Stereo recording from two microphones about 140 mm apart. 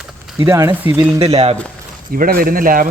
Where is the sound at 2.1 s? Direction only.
90° right.